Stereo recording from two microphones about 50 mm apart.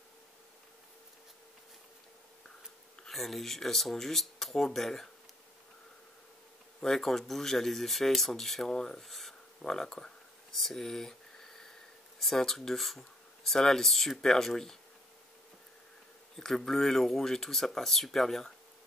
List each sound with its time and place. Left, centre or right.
3.1 s speech: centre
6.8 s speech: centre
9.6 s speech: centre
10.6 s a sound: centre
12.2 s speech: centre
16.3 s speech: centre